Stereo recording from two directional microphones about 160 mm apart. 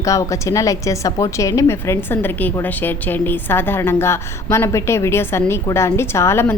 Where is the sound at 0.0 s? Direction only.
20° left (ahead or behind).